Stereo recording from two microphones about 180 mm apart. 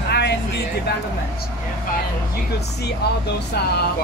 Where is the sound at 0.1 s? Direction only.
70° left (ahead or behind).